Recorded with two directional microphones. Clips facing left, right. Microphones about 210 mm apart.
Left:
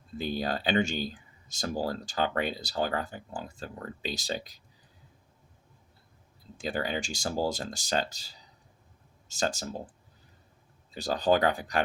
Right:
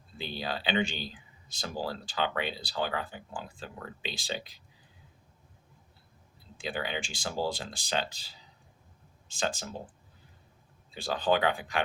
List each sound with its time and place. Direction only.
0.2 s speech: 45° left (ahead or behind)
6.6 s speech: 40° left (ahead or behind)
10.9 s speech: 40° left (ahead or behind)